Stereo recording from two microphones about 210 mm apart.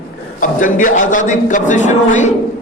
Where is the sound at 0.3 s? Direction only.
40° left (ahead or behind).